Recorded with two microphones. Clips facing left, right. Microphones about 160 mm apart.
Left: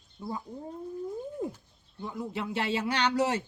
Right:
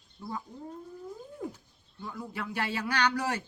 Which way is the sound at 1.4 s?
25° left (ahead or behind).